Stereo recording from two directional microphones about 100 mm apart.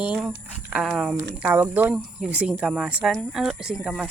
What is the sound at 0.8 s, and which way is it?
Speech, centre (ahead or behind).